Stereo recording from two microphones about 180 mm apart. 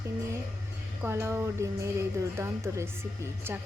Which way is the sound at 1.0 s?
15° right (ahead or behind).